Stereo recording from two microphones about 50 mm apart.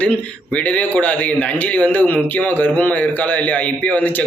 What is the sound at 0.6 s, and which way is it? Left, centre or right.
A man's voice, left.